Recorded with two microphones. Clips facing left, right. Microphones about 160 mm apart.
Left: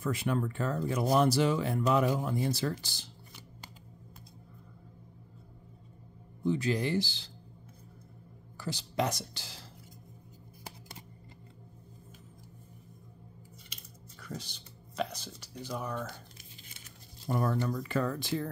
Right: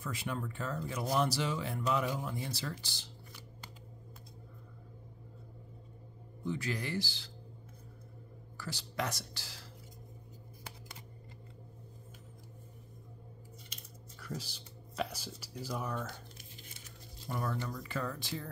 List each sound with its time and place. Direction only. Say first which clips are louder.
0.0 s speech: left 8 dB; 55° left (ahead or behind)
6.4 s speech: left 8 dB; 25° left (ahead or behind)
8.5 s speech: left 6 dB; 20° left (ahead or behind)
14.2 s speech: even; 5° right (ahead or behind)
17.3 s speech: left 7 dB; 40° left (ahead or behind)
17.6 s speech: left 7 dB; 60° left (ahead or behind)